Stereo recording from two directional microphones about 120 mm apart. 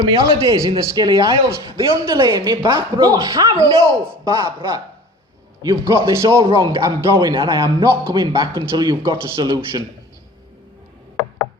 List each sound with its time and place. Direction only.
0.0 s a man's voice: 30° right (ahead or behind)
7.2 s speech: 40° right (ahead or behind)
7.6 s a man's voice: 25° right (ahead or behind)
8.1 s speech: 35° right (ahead or behind)